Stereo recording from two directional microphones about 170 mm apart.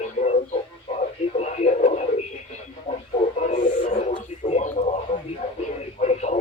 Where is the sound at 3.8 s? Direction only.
35° left (ahead or behind).